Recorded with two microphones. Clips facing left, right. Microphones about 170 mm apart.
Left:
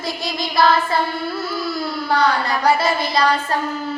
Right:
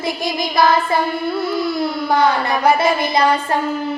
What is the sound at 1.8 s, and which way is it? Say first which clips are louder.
Speech: right 1 dB; 20° right (ahead or behind).